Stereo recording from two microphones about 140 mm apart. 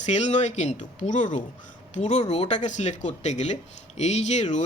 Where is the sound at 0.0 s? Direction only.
55° left (ahead or behind).